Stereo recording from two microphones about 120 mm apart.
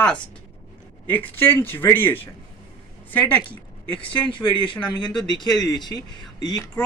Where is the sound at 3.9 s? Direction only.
45° left (ahead or behind).